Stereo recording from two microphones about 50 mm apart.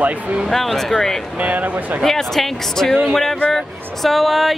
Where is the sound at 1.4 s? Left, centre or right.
Right.